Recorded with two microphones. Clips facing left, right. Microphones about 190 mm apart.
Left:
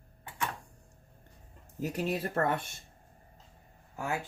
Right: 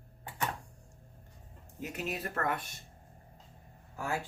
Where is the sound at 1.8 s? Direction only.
35° left (ahead or behind).